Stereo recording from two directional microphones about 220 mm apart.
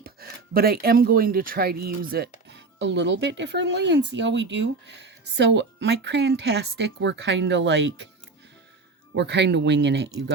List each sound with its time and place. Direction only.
0.0 s speech: 45° right (ahead or behind)
9.1 s speech: 50° right (ahead or behind)